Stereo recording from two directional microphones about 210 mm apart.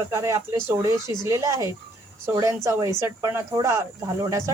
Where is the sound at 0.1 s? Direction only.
15° right (ahead or behind).